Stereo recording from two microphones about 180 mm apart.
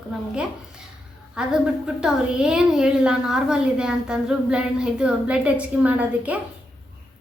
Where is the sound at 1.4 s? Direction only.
5° right (ahead or behind).